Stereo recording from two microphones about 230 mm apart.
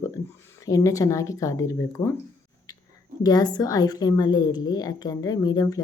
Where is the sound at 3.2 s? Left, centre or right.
Centre.